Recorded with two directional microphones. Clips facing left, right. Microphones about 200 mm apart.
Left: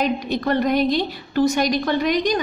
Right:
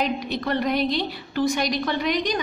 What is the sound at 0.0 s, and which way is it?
A woman's voice, 45° left (ahead or behind).